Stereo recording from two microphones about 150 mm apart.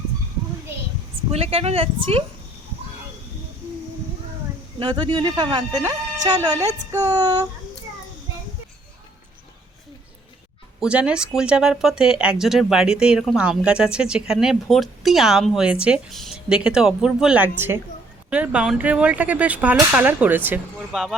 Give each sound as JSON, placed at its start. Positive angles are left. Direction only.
{"t": 1.3, "sound": "speech", "side_deg": -40}
{"t": 4.8, "sound": "speech", "side_deg": -30}
{"t": 10.8, "sound": "speech", "side_deg": -5}